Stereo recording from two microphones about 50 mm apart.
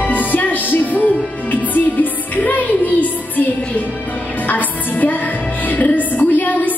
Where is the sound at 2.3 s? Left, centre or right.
Left.